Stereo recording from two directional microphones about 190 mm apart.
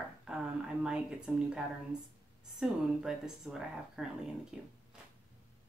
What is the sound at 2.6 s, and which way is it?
Speech, 5° right (ahead or behind).